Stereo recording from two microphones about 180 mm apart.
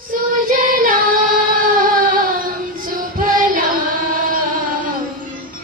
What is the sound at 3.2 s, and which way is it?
Music, 50° right (ahead or behind).